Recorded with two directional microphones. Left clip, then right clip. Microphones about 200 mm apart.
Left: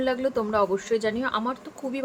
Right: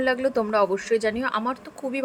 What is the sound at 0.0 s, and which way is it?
Speech, 20° right (ahead or behind).